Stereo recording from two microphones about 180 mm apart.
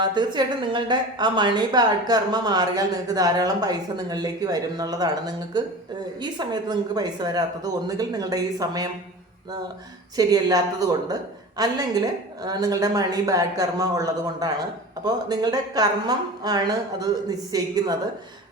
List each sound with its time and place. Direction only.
0.0 s a woman's voice: 25° right (ahead or behind)
10.2 s a woman's voice: 20° right (ahead or behind)